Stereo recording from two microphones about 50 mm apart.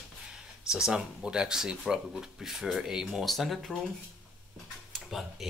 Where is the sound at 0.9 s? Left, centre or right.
Centre.